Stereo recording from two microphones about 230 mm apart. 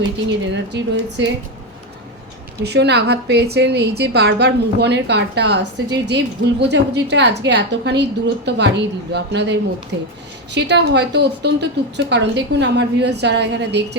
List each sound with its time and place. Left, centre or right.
0.3 s a woman's voice: right
2.6 s a woman's voice: right